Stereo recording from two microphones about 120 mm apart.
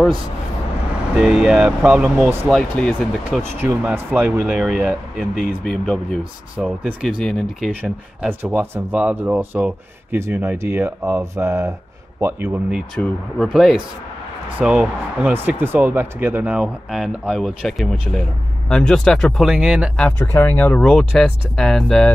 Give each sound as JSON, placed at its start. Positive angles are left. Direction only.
{"t": 1.2, "sound": "speech", "side_deg": -5}
{"t": 2.5, "sound": "speech", "side_deg": 5}
{"t": 3.8, "sound": "speech", "side_deg": -15}
{"t": 6.5, "sound": "speech", "side_deg": -10}
{"t": 7.8, "sound": "speech", "side_deg": -15}
{"t": 12.9, "sound": "speech", "side_deg": 5}
{"t": 20.0, "sound": "speech", "side_deg": 15}